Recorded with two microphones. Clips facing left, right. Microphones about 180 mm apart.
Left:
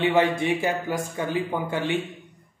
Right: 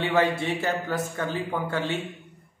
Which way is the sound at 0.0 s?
15° left (ahead or behind).